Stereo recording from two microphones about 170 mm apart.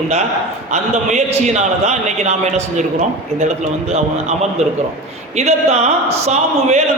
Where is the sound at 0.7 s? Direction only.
40° right (ahead or behind).